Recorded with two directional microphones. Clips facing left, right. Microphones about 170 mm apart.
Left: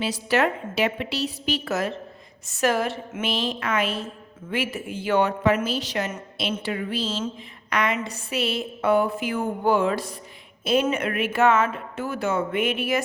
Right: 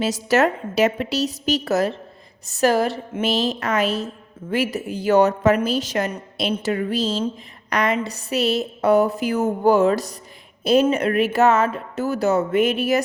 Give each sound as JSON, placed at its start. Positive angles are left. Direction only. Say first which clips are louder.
{"t": 0.0, "sound": "a woman's voice", "louder": "right 4 dB", "side_deg": -40}